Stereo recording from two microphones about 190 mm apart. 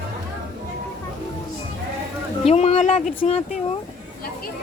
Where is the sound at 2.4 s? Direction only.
35° left (ahead or behind).